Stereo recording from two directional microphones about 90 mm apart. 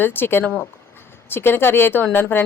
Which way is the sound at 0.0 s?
25° left (ahead or behind).